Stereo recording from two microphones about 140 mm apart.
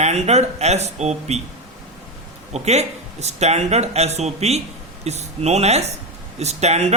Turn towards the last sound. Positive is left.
turn(degrees=-50)  # may be behind; listen again after turning